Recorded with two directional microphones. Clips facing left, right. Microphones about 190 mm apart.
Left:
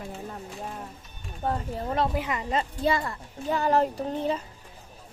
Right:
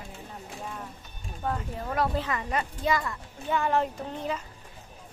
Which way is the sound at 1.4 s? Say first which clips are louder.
Left 3 dB; 35° left (ahead or behind).